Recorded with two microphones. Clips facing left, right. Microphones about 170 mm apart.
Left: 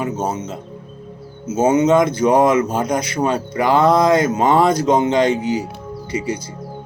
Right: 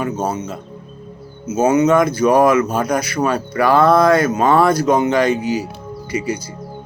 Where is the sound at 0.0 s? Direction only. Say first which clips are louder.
Right 1 dB; 25° left (ahead or behind).